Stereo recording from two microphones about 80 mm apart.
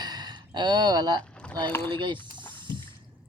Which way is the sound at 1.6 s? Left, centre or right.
Left.